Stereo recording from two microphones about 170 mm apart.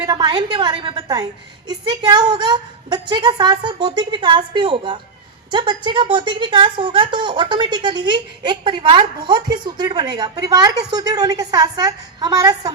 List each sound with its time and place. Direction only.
0.0 s speech: 25° right (ahead or behind)